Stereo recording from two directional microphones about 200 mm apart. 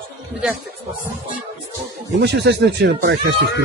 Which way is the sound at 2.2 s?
60° right (ahead or behind).